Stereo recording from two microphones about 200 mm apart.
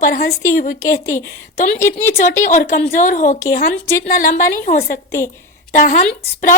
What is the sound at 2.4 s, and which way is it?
A woman's voice, 40° left (ahead or behind).